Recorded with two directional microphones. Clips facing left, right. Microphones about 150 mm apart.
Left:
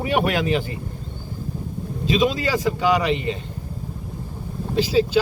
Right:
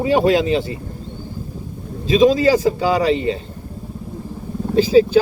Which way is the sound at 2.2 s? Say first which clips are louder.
Right 10 dB; 35° right (ahead or behind).